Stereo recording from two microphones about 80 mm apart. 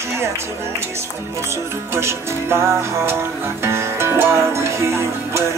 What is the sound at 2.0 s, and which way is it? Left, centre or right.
Music, right.